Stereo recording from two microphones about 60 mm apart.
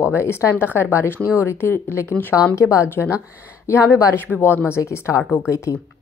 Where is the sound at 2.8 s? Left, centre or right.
Left.